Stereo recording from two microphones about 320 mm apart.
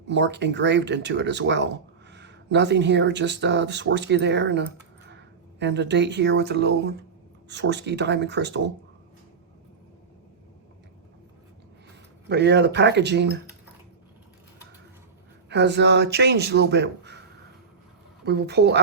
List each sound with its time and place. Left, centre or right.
0.1 s speech: right
12.3 s speech: right
15.4 s speech: right
18.3 s speech: right